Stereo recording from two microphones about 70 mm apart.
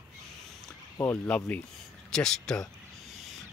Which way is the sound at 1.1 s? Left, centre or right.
Centre.